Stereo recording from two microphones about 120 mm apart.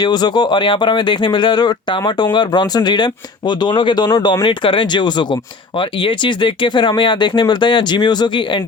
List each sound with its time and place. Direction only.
0.0 s speech: 35° left (ahead or behind)